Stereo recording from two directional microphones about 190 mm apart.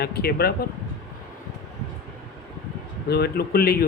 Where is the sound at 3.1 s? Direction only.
55° left (ahead or behind).